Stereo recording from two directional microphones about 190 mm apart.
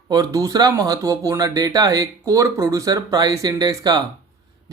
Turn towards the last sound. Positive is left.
turn(degrees=-20)  # may be behind; listen again after turning